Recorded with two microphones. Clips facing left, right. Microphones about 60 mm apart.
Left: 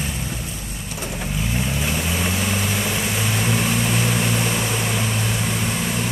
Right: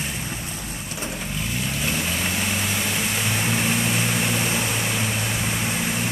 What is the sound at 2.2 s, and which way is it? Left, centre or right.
Vehicle, centre.